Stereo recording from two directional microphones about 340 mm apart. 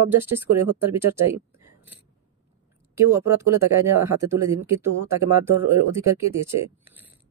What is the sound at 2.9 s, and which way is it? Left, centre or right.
Speech, centre.